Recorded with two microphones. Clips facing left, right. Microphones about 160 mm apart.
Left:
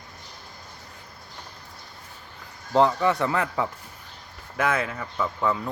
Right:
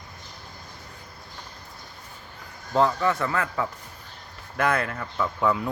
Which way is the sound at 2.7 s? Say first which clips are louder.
Left 2 dB; 20° left (ahead or behind).